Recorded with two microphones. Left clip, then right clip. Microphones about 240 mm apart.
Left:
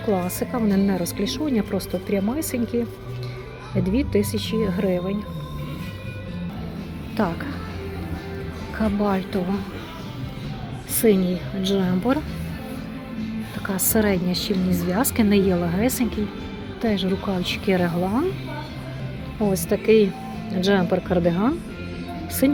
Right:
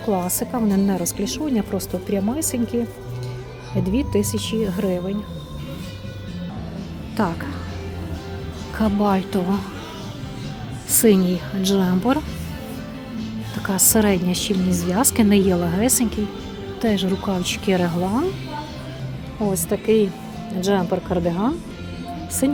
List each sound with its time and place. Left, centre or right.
0.3 s speech: centre
3.8 s speech: centre
7.2 s speech: centre
8.8 s speech: right
11.0 s speech: right
13.6 s speech: right
19.4 s speech: centre